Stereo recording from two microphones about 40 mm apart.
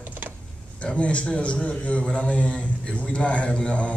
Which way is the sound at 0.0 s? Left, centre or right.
Right.